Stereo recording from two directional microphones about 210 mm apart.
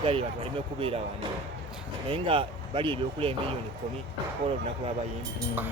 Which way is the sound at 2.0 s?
25° right (ahead or behind).